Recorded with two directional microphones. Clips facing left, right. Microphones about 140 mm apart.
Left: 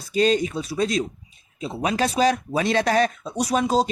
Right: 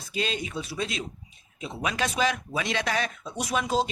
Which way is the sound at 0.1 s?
40° left (ahead or behind).